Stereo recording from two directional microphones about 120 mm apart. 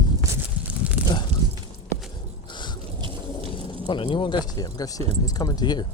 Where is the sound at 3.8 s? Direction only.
45° left (ahead or behind).